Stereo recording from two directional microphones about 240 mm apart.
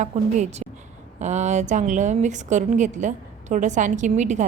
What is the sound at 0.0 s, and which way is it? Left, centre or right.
A woman's voice, right.